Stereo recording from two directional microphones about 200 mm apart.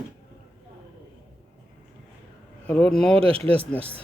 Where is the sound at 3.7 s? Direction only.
30° right (ahead or behind).